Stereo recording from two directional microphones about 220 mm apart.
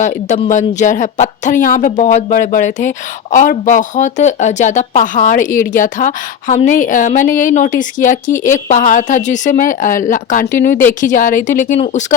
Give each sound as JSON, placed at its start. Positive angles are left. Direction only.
{"t": 0.0, "sound": "speech", "side_deg": 35}